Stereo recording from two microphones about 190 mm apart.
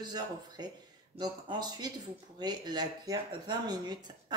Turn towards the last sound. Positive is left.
turn(degrees=-20)  # may be behind; listen again after turning